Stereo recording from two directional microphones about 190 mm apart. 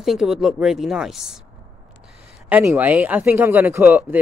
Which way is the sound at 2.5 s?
10° right (ahead or behind).